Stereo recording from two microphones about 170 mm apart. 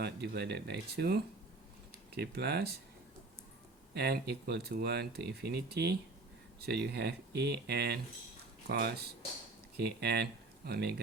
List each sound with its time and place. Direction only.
0.0 s speech: 80° right
3.9 s speech: 70° right (ahead or behind)
8.6 s speech: 85° right
9.7 s speech: 75° right (ahead or behind)